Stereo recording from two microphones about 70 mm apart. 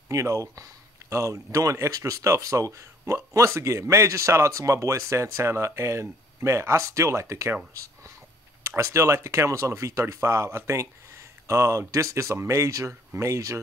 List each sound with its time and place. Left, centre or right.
0.1 s speech: right